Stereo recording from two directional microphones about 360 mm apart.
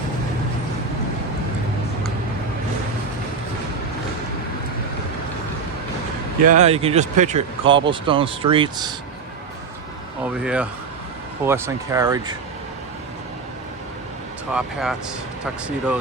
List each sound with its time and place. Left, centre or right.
6.4 s speech: centre
10.4 s speech: centre
14.5 s speech: centre